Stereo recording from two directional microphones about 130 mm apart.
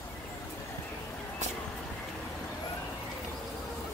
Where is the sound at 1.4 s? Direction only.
60° right (ahead or behind).